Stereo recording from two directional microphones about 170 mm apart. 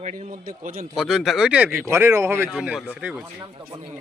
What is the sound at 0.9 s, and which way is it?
Speech, centre (ahead or behind).